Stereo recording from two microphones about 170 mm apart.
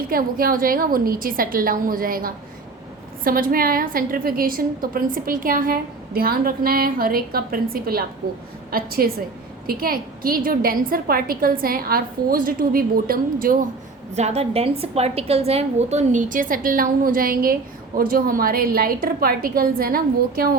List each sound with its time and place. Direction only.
0.1 s a woman's voice: 55° right (ahead or behind)
14.2 s a woman's voice: 40° right (ahead or behind); by 20.6 s 60° right (ahead or behind)